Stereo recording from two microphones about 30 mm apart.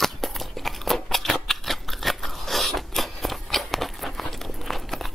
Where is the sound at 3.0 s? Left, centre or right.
Centre.